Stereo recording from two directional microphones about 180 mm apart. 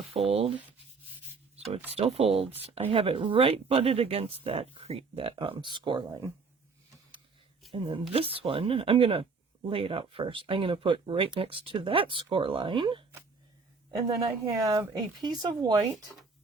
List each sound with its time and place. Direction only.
0.3 s speech: 30° right (ahead or behind)
2.0 s speech: 35° right (ahead or behind)
7.7 s speech: 30° right (ahead or behind)